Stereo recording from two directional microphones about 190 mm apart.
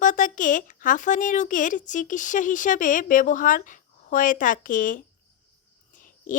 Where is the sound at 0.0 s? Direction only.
45° left (ahead or behind).